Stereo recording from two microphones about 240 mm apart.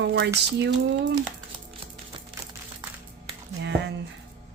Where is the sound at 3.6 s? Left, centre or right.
Right.